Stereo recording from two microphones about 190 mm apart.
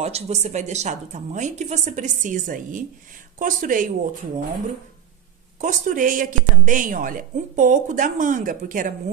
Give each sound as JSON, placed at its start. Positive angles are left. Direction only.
{"t": 0.0, "sound": "a woman's voice", "side_deg": -35}
{"t": 5.6, "sound": "a woman's voice", "side_deg": -40}